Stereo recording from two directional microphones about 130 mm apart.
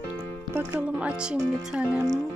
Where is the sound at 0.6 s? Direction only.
15° right (ahead or behind).